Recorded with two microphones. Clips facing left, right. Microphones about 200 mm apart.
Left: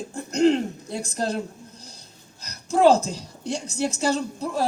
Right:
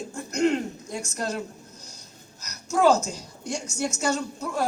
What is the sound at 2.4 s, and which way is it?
A woman's voice, 30° left (ahead or behind).